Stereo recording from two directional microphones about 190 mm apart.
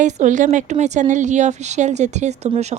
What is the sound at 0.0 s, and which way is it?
Speech, 40° right (ahead or behind).